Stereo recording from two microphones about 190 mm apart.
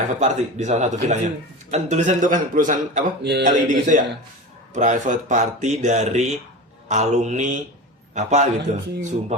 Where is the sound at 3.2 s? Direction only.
60° right (ahead or behind).